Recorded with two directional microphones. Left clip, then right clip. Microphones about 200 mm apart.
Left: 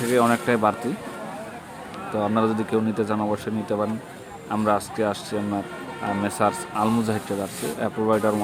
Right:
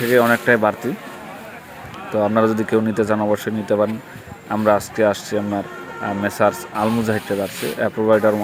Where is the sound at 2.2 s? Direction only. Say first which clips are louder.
Right 6 dB; 15° right (ahead or behind).